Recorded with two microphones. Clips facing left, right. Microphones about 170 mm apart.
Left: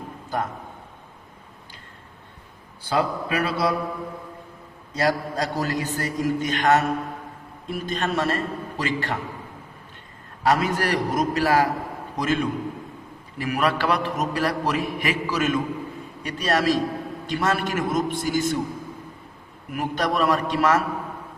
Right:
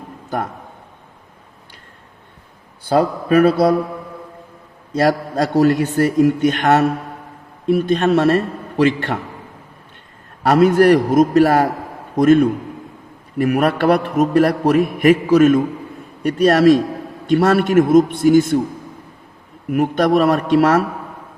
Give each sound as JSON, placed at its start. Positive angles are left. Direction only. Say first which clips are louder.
{"t": 2.9, "sound": "speech", "louder": "right 9 dB", "side_deg": -50}
{"t": 4.9, "sound": "a man's voice", "louder": "right 7 dB", "side_deg": -55}
{"t": 10.4, "sound": "a man's voice", "louder": "right 10 dB", "side_deg": -60}
{"t": 19.7, "sound": "a man's voice", "louder": "right 10 dB", "side_deg": -55}